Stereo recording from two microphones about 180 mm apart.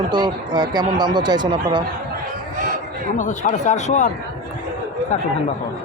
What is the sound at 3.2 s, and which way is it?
Speech, 45° left (ahead or behind).